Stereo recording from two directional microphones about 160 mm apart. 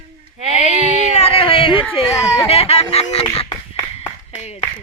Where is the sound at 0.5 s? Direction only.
45° left (ahead or behind).